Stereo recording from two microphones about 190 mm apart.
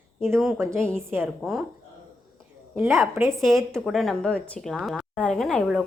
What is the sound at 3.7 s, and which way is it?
A woman's voice, centre (ahead or behind).